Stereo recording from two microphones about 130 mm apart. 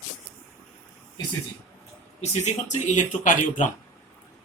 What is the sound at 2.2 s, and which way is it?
Speech, 65° left (ahead or behind).